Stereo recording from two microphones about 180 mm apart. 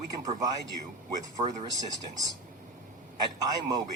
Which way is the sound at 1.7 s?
20° right (ahead or behind).